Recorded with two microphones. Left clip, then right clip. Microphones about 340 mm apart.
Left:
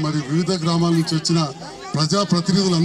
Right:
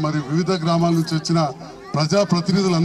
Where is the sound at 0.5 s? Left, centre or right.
Centre.